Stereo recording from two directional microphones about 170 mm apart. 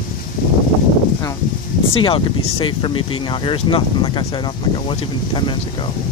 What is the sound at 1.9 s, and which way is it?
Speech, 30° left (ahead or behind).